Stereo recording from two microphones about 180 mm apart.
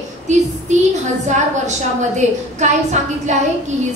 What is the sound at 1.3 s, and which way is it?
A woman's voice, 40° right (ahead or behind).